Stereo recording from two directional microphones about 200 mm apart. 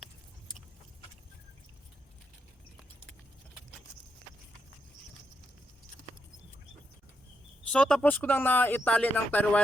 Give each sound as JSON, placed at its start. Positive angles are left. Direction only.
{"t": 7.7, "sound": "speech", "side_deg": 5}